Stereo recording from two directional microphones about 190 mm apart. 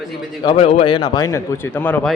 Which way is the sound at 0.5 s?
35° left (ahead or behind).